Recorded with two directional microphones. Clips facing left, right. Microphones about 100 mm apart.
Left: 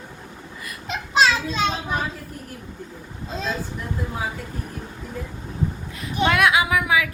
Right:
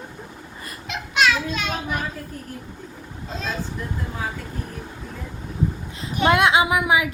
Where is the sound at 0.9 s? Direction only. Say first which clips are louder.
Left 2 dB; 30° left (ahead or behind).